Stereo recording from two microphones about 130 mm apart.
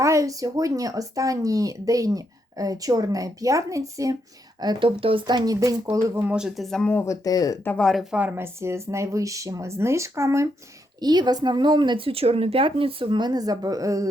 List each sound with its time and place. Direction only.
0.0 s speech: 25° right (ahead or behind)
4.6 s a woman's voice: 35° right (ahead or behind)
6.2 s speech: 5° right (ahead or behind)
7.0 s speech: 25° left (ahead or behind)
7.6 s speech: 15° left (ahead or behind)
8.1 s speech: 15° right (ahead or behind)
11.0 s a woman's voice: 30° right (ahead or behind)